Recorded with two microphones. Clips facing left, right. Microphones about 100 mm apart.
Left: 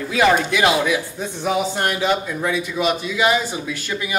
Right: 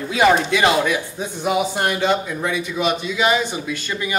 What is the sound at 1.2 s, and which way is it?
A woman's voice, 10° right (ahead or behind).